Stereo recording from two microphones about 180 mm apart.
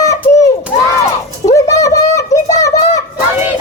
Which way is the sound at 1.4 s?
15° left (ahead or behind).